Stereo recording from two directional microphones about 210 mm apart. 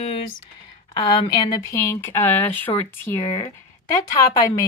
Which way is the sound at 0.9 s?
20° left (ahead or behind).